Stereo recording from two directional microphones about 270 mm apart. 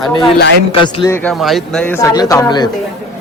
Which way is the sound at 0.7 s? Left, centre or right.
Centre.